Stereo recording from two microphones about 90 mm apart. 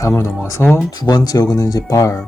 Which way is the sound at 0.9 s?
50° left (ahead or behind).